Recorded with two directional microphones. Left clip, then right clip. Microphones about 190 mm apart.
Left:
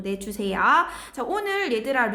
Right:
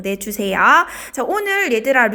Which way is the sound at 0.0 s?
35° right (ahead or behind).